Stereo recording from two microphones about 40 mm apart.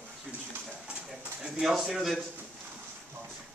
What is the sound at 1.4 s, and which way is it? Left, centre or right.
Speech, centre.